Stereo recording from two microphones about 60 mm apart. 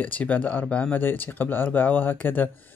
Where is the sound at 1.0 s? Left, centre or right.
Left.